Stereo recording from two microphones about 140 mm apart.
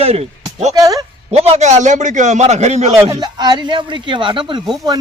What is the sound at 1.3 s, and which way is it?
A man's voice, 45° right (ahead or behind).